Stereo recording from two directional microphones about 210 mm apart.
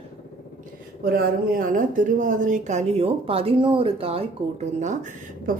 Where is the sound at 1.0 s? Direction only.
45° right (ahead or behind).